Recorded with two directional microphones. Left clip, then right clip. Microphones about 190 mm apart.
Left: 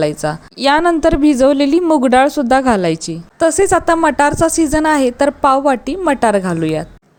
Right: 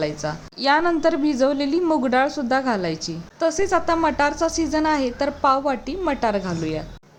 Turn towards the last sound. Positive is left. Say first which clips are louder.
# left 9 dB
turn(degrees=40)  # may be behind; listen again after turning